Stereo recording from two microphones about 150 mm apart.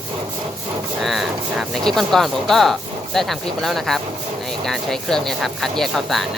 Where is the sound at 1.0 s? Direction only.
Centre (ahead or behind).